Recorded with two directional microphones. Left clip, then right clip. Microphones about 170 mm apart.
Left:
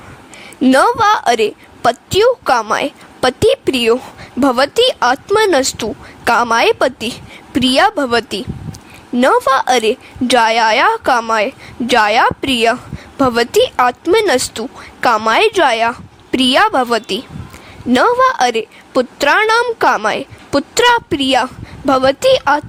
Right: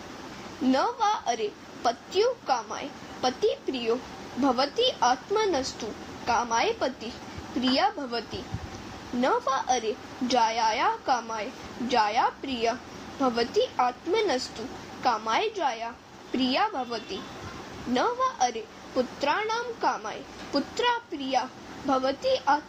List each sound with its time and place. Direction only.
0.6 s a woman's voice: 70° left (ahead or behind)